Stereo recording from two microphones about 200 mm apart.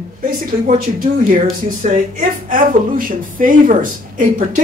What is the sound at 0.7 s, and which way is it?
Speech, 40° right (ahead or behind).